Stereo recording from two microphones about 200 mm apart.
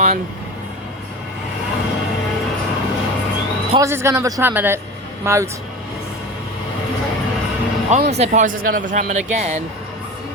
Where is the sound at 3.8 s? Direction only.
15° right (ahead or behind).